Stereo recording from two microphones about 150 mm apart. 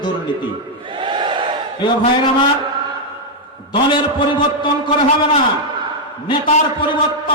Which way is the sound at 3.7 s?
35° left (ahead or behind).